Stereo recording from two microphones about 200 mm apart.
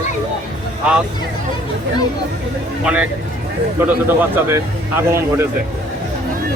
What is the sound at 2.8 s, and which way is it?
Speech, 5° right (ahead or behind).